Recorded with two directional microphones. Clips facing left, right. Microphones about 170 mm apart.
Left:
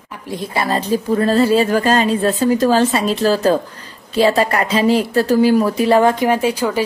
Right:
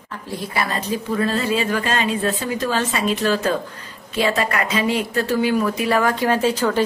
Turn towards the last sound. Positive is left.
turn(degrees=10)  # may be behind; listen again after turning